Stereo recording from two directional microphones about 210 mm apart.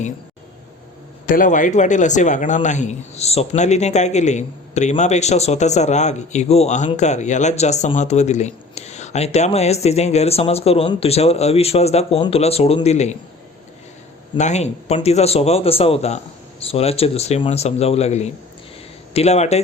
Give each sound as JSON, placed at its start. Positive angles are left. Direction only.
{"t": 1.3, "sound": "a man's voice", "side_deg": 40}
{"t": 14.3, "sound": "a man's voice", "side_deg": 35}